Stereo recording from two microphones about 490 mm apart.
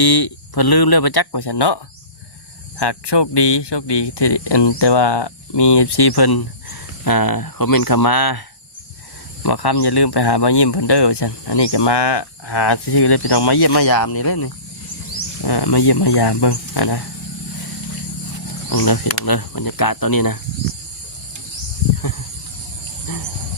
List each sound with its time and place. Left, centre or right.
0.0 s speech: left
18.7 s speech: left